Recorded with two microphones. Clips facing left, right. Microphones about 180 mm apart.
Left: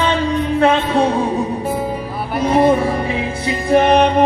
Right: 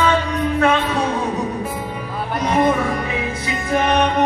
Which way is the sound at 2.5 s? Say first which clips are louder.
Left 4 dB; 30° left (ahead or behind).